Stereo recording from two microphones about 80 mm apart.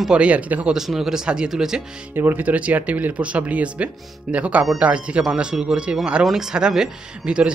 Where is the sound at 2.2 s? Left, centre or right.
Right.